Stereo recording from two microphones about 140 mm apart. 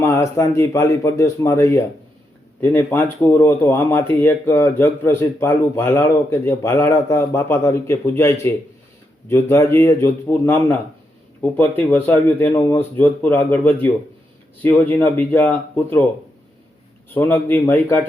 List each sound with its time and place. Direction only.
0.0 s a man's voice: 20° left (ahead or behind)
17.2 s speech: 15° left (ahead or behind)